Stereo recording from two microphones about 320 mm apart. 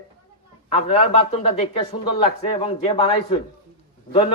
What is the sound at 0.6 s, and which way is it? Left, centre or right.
A man's voice, centre.